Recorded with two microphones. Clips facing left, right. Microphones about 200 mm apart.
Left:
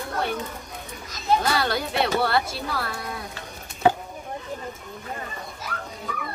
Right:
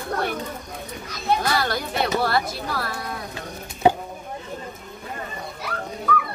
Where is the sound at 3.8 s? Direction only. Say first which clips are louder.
Right 2 dB; 15° right (ahead or behind).